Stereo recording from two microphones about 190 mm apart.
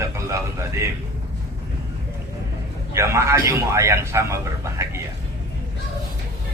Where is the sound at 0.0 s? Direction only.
15° right (ahead or behind).